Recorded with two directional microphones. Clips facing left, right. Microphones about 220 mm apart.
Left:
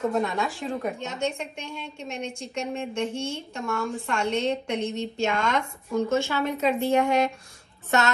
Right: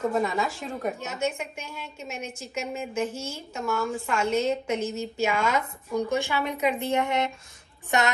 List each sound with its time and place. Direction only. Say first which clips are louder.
0.0 s a woman's voice: even; centre (ahead or behind); by 8.1 s 15° right (ahead or behind)